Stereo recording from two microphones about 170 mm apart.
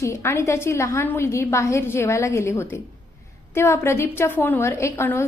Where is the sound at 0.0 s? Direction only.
15° left (ahead or behind).